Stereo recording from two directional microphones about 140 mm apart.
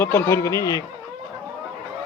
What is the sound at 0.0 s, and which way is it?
Speech, 15° left (ahead or behind).